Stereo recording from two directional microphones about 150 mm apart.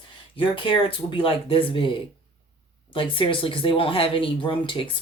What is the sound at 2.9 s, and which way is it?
Speech, 35° left (ahead or behind).